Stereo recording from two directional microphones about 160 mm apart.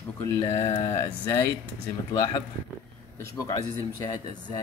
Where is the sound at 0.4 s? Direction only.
20° left (ahead or behind).